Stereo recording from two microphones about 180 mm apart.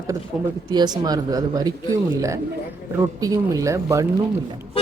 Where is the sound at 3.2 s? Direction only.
20° right (ahead or behind).